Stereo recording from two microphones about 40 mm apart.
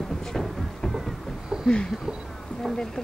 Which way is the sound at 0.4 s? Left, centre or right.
Centre.